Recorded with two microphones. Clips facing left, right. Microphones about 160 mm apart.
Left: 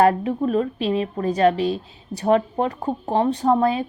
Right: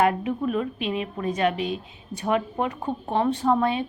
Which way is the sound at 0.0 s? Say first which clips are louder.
Left 5 dB; 35° left (ahead or behind).